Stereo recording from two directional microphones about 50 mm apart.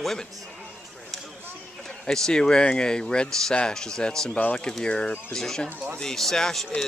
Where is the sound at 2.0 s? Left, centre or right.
Centre.